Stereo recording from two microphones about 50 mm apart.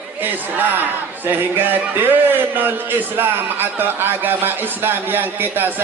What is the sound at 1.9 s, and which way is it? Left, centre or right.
A man's voice, right.